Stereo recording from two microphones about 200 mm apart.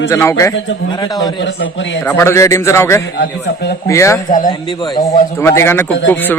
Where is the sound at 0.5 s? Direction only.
65° left (ahead or behind).